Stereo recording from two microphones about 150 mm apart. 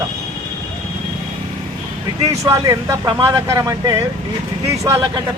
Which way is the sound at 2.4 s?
20° right (ahead or behind).